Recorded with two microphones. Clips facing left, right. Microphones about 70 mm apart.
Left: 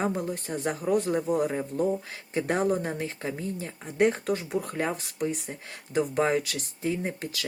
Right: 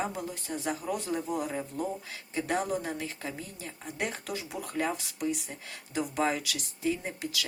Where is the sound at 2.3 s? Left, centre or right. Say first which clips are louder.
Left 5 dB; left.